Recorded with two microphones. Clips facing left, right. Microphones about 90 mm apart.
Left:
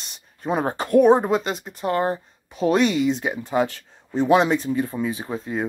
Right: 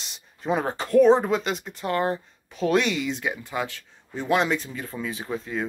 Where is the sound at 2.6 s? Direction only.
35° left (ahead or behind).